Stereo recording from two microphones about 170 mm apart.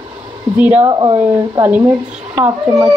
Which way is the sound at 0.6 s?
10° right (ahead or behind).